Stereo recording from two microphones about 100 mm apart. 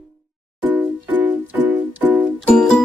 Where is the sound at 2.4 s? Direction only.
5° left (ahead or behind).